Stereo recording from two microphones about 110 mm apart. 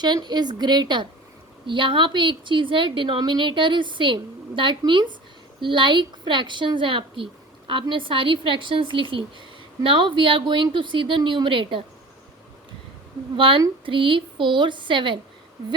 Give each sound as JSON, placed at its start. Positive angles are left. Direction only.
{"t": 0.0, "sound": "a woman's voice", "side_deg": -40}
{"t": 13.3, "sound": "a woman's voice", "side_deg": -55}